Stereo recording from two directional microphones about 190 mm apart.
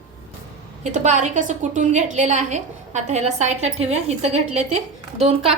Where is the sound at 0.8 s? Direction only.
40° right (ahead or behind).